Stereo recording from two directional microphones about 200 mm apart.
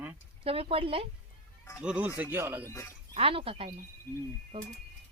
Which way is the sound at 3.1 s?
30° right (ahead or behind).